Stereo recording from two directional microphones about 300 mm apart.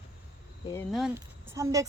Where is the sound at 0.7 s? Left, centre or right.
Centre.